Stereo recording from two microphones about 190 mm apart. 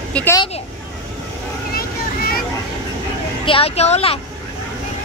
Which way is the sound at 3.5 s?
30° left (ahead or behind).